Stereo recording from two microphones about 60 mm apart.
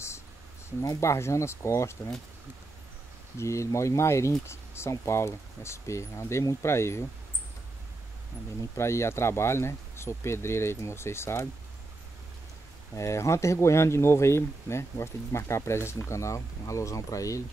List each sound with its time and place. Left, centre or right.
1.0 s speech: left
3.3 s speech: left
8.7 s speech: left
12.9 s speech: left